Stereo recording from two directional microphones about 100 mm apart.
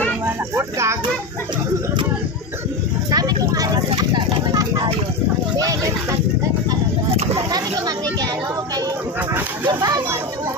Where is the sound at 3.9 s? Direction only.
45° right (ahead or behind).